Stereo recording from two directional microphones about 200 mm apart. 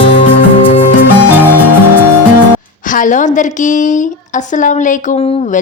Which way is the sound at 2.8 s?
40° left (ahead or behind).